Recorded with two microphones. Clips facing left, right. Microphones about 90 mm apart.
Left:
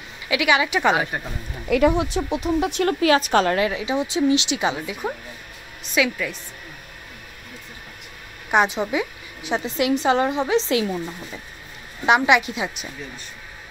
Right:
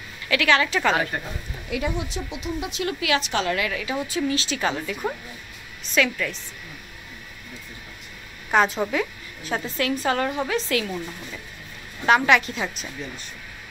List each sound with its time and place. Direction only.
0.3 s a woman's voice: 15° left (ahead or behind)
1.7 s speech: 55° left (ahead or behind)
3.5 s a woman's voice: 25° left (ahead or behind); by 6.3 s 10° left (ahead or behind)
8.5 s a woman's voice: 10° left (ahead or behind)